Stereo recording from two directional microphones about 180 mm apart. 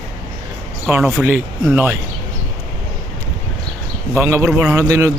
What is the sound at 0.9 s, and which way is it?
A man's voice, 10° right (ahead or behind).